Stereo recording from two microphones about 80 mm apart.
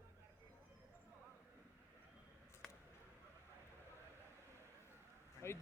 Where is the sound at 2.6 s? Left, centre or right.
Centre.